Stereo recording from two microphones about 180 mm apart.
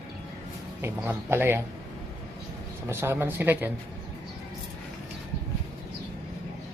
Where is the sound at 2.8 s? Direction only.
15° right (ahead or behind).